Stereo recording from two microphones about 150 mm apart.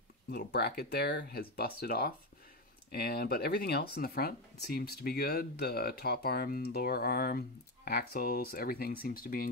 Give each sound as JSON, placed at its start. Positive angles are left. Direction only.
{"t": 0.3, "sound": "speech", "side_deg": 90}